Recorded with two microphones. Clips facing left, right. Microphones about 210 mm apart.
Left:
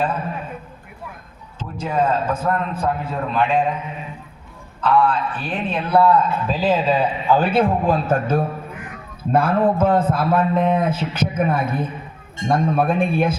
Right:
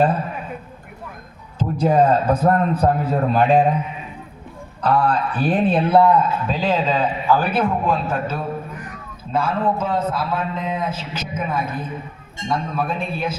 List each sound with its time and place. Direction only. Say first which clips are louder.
1.5 s a man's voice: right 6 dB; 40° right (ahead or behind)
4.8 s a man's voice: left 1 dB; 40° right (ahead or behind); by 6.2 s 15° right (ahead or behind)
6.5 s a man's voice: left 3 dB; 5° left (ahead or behind)
7.3 s a man's voice: left 3 dB; 25° left (ahead or behind)
8.1 s a man's voice: left 5 dB; 50° left (ahead or behind)